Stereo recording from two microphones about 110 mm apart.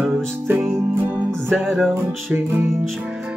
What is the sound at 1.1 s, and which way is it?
Music, centre (ahead or behind).